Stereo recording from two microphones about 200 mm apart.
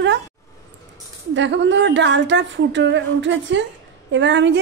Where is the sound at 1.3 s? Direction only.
65° right (ahead or behind).